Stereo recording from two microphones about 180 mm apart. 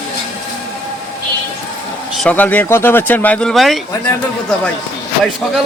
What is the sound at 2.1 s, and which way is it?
Speech, 5° left (ahead or behind).